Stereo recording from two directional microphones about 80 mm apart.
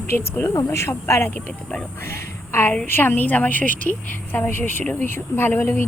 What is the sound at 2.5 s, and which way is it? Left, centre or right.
A woman's voice, left.